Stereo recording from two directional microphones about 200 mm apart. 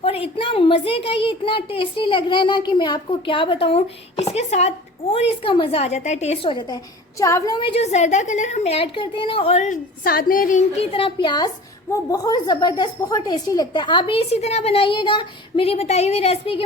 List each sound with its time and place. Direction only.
0.0 s a woman's voice: 30° left (ahead or behind)
10.0 s a woman's voice: 50° left (ahead or behind); by 16.6 s 30° left (ahead or behind)